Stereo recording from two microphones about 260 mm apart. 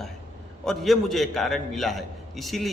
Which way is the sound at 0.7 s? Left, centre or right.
Centre.